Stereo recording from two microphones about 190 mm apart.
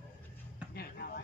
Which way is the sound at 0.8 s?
55° left (ahead or behind).